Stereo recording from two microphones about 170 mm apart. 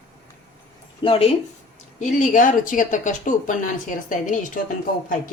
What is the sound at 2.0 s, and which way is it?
Speech, 45° left (ahead or behind).